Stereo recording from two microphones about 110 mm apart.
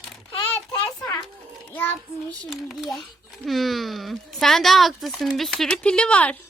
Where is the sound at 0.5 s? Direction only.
5° left (ahead or behind).